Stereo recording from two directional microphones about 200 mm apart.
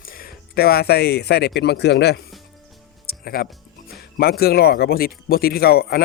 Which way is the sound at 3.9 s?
50° left (ahead or behind).